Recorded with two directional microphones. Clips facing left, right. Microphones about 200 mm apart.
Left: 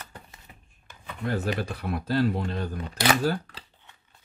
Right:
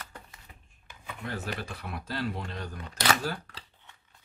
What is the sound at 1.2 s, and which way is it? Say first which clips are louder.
Speech: left 8 dB; 40° left (ahead or behind).